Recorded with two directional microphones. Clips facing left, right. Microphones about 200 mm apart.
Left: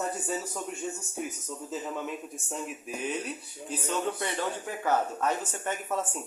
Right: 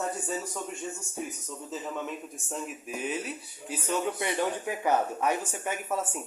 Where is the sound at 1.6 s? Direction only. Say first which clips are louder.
Even; centre (ahead or behind).